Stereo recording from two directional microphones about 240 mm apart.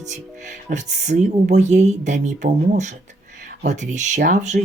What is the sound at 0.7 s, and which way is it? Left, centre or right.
Speech, right.